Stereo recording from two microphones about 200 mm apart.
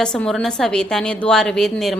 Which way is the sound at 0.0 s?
5° left (ahead or behind).